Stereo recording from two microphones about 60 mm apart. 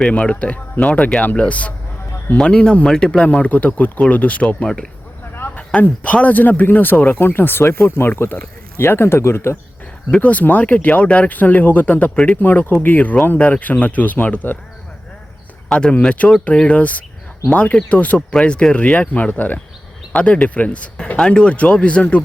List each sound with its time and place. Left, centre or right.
0.0 s speech: centre; by 8.1 s left
8.1 s speech: left
8.8 s speech: left
10.1 s speech: left
15.7 s speech: centre
18.3 s speech: centre